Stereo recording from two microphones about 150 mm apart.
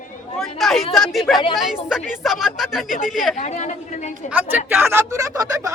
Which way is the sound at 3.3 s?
50° left (ahead or behind).